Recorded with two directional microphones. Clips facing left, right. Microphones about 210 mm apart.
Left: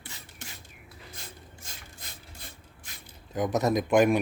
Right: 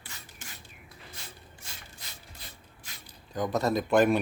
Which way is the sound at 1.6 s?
50° left (ahead or behind).